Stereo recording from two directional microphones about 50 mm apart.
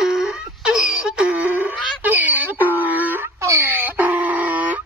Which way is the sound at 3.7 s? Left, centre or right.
Right.